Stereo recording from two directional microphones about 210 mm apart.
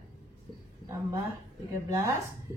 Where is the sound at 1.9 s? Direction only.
15° right (ahead or behind).